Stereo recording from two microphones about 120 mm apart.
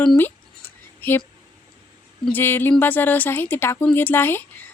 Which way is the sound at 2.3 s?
15° left (ahead or behind).